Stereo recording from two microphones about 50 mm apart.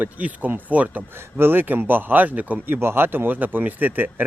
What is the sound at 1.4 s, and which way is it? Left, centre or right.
A man's voice, right.